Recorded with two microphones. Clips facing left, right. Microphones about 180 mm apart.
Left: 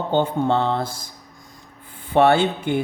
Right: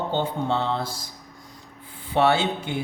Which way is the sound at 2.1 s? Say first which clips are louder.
Left 5 dB; 55° left (ahead or behind).